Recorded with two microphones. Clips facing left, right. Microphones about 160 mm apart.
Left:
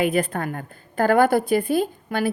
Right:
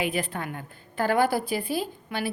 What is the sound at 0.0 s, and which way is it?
Speech, 45° left (ahead or behind).